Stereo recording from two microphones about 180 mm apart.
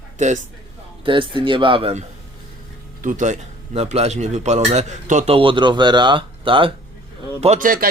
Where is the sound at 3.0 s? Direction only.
45° right (ahead or behind).